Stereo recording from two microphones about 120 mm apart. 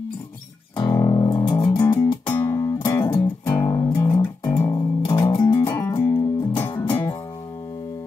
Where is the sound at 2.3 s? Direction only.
15° left (ahead or behind).